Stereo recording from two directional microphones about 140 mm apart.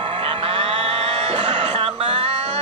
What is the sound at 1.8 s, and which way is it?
Music, 35° right (ahead or behind).